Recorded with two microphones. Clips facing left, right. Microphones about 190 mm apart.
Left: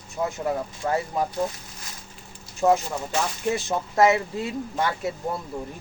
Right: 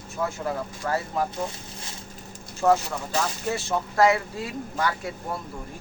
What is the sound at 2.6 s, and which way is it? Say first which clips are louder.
A man's voice: left 1 dB; 20° left (ahead or behind).